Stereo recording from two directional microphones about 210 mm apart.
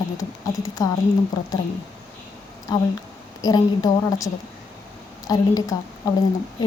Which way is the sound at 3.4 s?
15° left (ahead or behind).